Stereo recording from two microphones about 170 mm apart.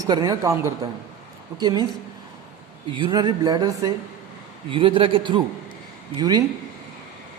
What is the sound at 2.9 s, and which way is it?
Speech, 25° right (ahead or behind).